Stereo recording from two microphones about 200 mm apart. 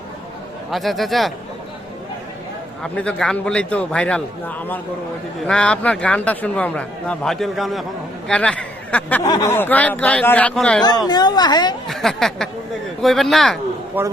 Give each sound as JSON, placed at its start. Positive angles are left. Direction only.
{"t": 0.7, "sound": "a man's voice", "side_deg": 0}
{"t": 2.8, "sound": "a man's voice", "side_deg": 5}
{"t": 10.8, "sound": "a woman's voice", "side_deg": 20}
{"t": 11.9, "sound": "a man's voice", "side_deg": 0}
{"t": 14.0, "sound": "a man's voice", "side_deg": -10}